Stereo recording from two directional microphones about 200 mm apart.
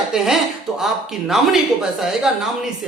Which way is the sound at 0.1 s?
Centre (ahead or behind).